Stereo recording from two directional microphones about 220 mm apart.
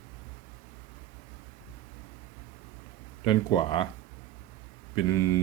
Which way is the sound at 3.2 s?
20° left (ahead or behind).